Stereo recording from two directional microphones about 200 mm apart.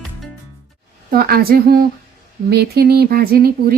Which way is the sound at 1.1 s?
50° right (ahead or behind).